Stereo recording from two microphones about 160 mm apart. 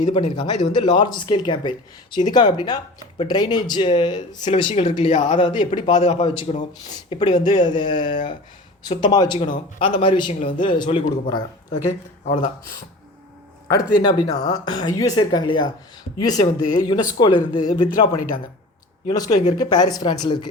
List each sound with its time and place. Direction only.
0.1 s speech: 35° left (ahead or behind)
5.4 s speech: 30° left (ahead or behind)
6.0 s speech: 40° left (ahead or behind)
12.2 s speech: 50° left (ahead or behind)
13.7 s speech: 25° left (ahead or behind)